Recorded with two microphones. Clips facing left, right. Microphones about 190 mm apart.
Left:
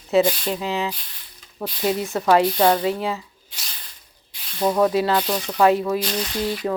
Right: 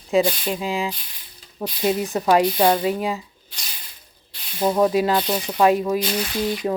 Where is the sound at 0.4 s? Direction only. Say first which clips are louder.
Even; 10° right (ahead or behind).